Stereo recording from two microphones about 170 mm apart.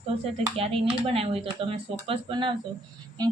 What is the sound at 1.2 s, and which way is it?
A woman's voice, 35° right (ahead or behind).